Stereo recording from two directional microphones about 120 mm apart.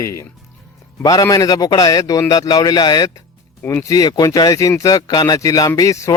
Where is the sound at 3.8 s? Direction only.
30° left (ahead or behind).